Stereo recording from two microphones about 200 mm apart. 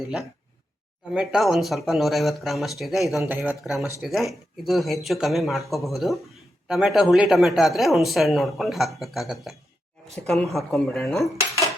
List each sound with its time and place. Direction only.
1.1 s speech: 5° right (ahead or behind)